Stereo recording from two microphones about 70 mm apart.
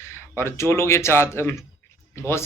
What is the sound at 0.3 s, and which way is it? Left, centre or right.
Speech, left.